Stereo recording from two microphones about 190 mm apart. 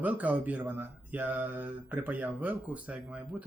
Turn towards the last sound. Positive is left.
turn(degrees=-5)  # may be behind; listen again after turning